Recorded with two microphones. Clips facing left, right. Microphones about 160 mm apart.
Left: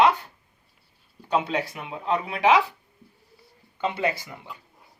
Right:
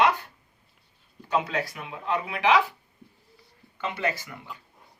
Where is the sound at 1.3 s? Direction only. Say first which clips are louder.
Left 2 dB; 20° left (ahead or behind).